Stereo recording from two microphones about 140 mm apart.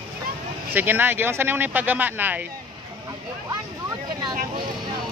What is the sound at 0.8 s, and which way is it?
Speech, 15° right (ahead or behind).